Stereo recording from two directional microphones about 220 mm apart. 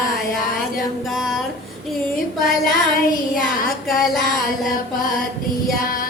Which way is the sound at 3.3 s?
40° left (ahead or behind).